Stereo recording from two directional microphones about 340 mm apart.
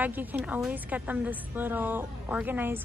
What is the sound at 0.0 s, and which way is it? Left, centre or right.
A woman's voice, centre.